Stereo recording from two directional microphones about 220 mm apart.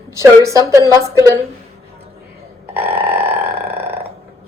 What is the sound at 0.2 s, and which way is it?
Speech, 15° right (ahead or behind).